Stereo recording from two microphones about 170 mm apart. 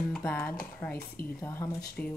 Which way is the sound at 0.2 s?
15° left (ahead or behind).